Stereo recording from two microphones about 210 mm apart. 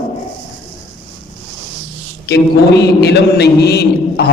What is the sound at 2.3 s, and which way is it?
A man's voice, 50° left (ahead or behind).